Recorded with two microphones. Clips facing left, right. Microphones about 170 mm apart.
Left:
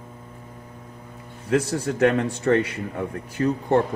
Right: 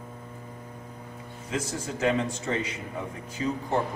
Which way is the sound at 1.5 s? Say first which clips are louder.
Left 10 dB; 65° left (ahead or behind).